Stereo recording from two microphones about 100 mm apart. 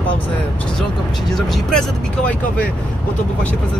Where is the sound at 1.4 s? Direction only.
5° left (ahead or behind).